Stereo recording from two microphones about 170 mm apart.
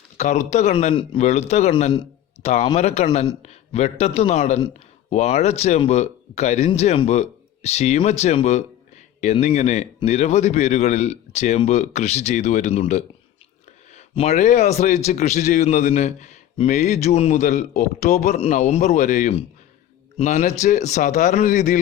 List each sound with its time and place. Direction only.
0.2 s a man's voice: 45° left (ahead or behind)